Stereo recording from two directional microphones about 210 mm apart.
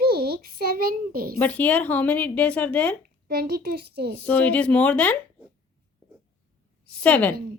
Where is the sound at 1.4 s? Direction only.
5° left (ahead or behind).